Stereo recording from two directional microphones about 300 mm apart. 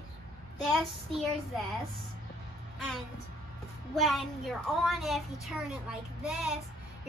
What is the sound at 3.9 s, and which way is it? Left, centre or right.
A child's voice, centre.